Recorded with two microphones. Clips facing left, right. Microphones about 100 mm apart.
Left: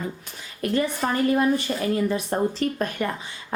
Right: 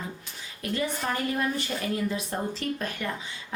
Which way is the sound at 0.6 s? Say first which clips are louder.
Left 6 dB; 50° left (ahead or behind).